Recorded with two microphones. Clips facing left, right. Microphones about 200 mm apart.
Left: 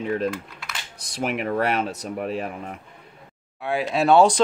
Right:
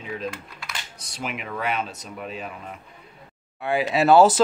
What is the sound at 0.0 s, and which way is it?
Speech, 55° left (ahead or behind).